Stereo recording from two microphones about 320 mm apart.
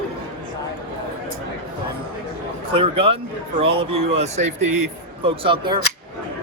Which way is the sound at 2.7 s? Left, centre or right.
Centre.